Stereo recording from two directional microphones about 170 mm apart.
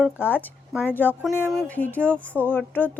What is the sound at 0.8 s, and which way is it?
Speech, 10° left (ahead or behind).